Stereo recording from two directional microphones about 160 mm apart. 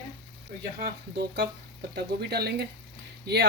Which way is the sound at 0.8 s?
80° right.